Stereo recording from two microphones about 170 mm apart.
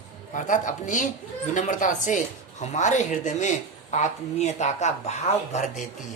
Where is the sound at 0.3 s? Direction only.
50° left (ahead or behind).